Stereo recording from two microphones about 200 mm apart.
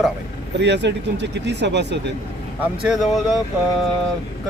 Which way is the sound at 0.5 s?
60° right (ahead or behind).